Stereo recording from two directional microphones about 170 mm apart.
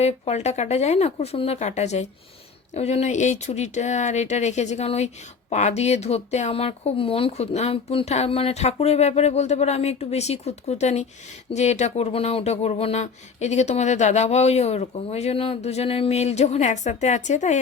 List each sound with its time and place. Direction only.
0.0 s speech: 40° left (ahead or behind)